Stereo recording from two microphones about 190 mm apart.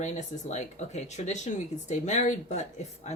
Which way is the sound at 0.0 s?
40° left (ahead or behind).